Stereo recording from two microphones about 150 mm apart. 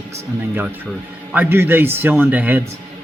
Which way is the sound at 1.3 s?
15° right (ahead or behind).